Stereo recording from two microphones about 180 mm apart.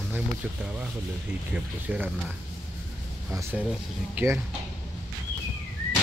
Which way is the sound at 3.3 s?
15° right (ahead or behind).